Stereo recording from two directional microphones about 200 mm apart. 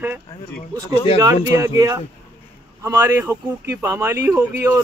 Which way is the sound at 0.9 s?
30° left (ahead or behind).